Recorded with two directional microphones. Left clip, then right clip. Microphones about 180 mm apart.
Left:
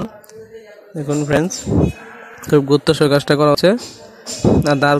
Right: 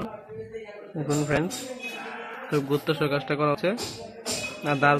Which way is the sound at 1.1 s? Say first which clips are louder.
Left 9 dB; 40° left (ahead or behind).